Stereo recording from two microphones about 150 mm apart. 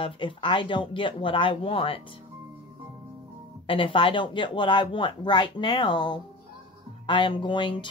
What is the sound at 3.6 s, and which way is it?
Speech, 35° left (ahead or behind).